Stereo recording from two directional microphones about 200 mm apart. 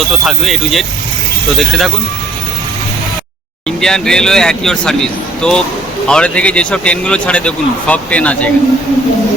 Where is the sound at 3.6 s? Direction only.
5° left (ahead or behind).